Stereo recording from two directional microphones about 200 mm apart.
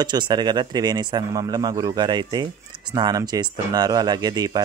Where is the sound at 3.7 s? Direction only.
20° right (ahead or behind).